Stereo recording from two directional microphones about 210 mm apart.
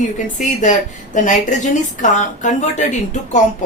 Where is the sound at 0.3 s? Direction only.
35° left (ahead or behind).